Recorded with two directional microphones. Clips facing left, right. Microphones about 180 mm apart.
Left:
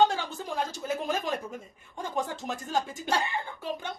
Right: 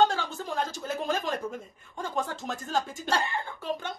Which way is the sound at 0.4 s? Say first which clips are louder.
Right 1 dB; 10° left (ahead or behind).